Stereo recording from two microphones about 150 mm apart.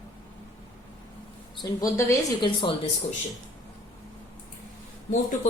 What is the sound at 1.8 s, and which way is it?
Speech, 20° left (ahead or behind).